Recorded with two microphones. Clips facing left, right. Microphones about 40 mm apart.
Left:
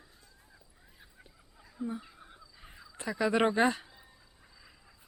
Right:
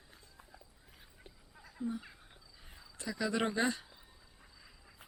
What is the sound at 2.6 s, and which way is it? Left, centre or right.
Crow, left.